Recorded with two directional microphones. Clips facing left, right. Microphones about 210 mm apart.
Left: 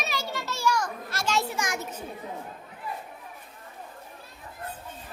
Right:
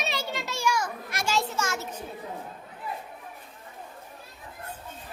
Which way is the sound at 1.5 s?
15° left (ahead or behind).